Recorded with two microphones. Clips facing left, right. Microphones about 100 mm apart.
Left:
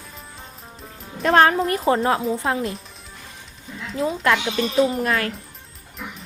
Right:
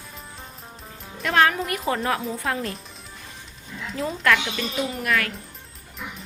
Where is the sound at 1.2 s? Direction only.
35° left (ahead or behind).